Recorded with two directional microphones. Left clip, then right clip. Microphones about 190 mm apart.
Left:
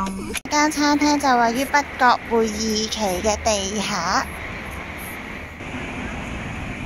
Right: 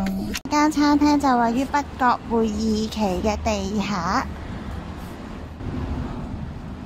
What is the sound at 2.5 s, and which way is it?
Speech, 35° right (ahead or behind).